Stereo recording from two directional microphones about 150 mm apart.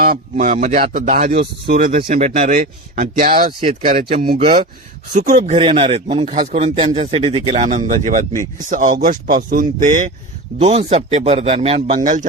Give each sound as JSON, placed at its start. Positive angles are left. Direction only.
{"t": 0.0, "sound": "speech", "side_deg": -70}
{"t": 0.8, "sound": "speech", "side_deg": -65}
{"t": 2.2, "sound": "speech", "side_deg": -50}
{"t": 3.6, "sound": "a man's voice", "side_deg": -40}
{"t": 4.4, "sound": "speech", "side_deg": -60}
{"t": 10.6, "sound": "a man's voice", "side_deg": -45}
{"t": 11.9, "sound": "speech", "side_deg": -60}